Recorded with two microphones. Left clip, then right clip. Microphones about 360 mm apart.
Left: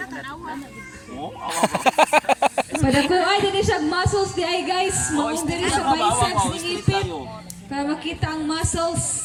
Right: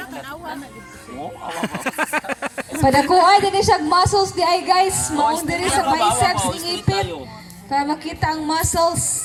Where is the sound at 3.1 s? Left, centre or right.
Centre.